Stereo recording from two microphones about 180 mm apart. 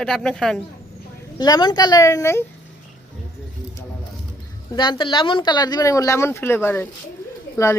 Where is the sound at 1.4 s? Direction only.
25° left (ahead or behind).